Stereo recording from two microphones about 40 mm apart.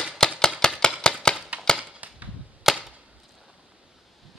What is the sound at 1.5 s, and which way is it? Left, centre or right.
Cap gun, right.